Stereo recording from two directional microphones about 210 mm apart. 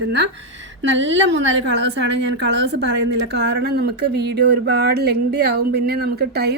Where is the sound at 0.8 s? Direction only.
60° right (ahead or behind).